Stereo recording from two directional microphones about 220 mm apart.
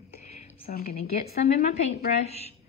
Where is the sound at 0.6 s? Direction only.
45° left (ahead or behind).